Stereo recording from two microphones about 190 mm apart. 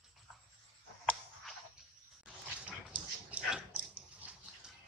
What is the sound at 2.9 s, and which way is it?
Dog, 5° right (ahead or behind).